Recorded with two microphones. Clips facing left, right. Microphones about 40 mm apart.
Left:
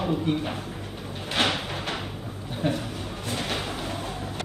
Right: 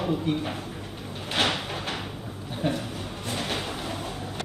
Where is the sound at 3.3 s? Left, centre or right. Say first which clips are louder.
Even; centre.